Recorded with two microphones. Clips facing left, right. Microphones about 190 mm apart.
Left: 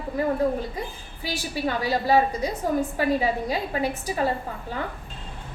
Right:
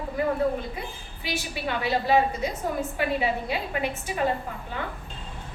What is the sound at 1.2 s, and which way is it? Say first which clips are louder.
A woman's voice: left 3 dB; 40° left (ahead or behind).